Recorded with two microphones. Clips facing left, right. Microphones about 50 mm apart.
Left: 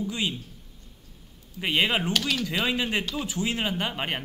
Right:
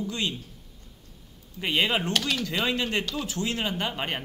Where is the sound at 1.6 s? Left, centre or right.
Centre.